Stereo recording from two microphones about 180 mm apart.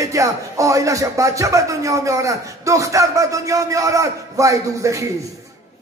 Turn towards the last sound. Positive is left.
turn(degrees=-15)  # may be behind; listen again after turning